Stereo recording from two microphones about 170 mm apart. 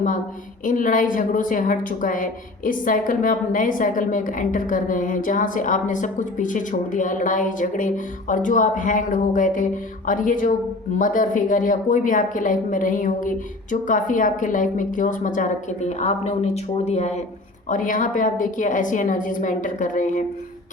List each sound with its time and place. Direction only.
0.6 s a woman's voice: 50° left (ahead or behind)
17.7 s a woman's voice: 50° left (ahead or behind)